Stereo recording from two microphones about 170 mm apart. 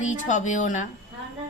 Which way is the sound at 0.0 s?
45° left (ahead or behind).